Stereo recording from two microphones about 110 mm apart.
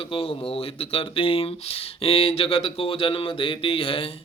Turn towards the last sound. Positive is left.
turn(degrees=55)  # may be behind; listen again after turning